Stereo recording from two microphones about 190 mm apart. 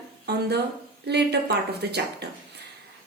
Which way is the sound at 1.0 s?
60° right (ahead or behind).